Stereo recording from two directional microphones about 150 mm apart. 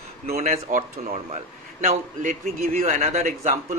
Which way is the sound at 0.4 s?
60° right (ahead or behind).